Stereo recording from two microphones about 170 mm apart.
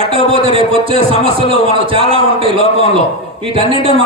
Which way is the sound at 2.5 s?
40° left (ahead or behind).